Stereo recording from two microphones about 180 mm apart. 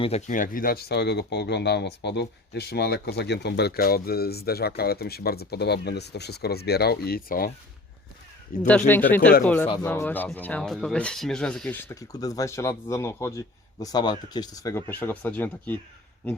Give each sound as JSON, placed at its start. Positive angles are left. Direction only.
{"t": 0.0, "sound": "speech", "side_deg": 40}
{"t": 8.9, "sound": "speech", "side_deg": 10}